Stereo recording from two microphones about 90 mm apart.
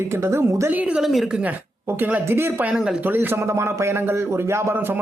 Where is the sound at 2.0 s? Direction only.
20° right (ahead or behind).